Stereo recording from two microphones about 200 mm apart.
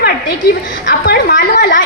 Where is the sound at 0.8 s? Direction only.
55° left (ahead or behind).